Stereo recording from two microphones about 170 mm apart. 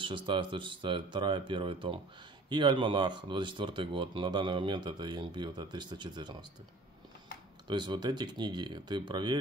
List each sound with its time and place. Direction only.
0.0 s speech: 30° right (ahead or behind)
7.6 s speech: 25° right (ahead or behind)